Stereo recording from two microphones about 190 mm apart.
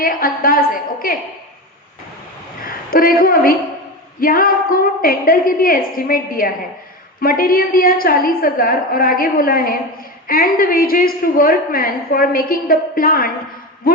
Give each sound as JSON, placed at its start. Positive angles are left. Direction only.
{"t": 0.0, "sound": "a woman's voice", "side_deg": 50}
{"t": 2.6, "sound": "a woman's voice", "side_deg": 50}